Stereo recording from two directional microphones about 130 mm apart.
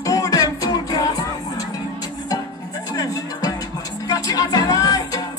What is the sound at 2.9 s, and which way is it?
Music, 25° left (ahead or behind).